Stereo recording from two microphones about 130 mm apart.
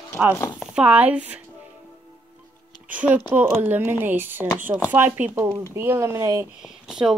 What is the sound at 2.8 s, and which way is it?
Speech, 10° right (ahead or behind).